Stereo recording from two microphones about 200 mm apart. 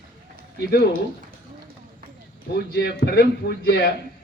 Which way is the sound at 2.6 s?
55° left (ahead or behind).